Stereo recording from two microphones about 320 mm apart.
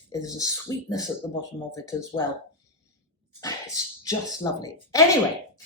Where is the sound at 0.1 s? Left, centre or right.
Centre.